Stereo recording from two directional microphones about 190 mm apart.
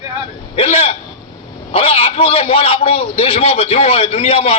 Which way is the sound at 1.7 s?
30° left (ahead or behind).